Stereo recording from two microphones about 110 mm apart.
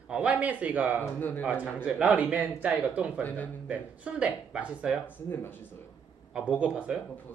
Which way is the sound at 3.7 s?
10° right (ahead or behind).